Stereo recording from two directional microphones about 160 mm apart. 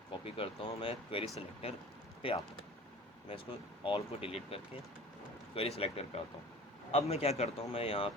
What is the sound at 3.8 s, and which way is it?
Speech, 35° left (ahead or behind).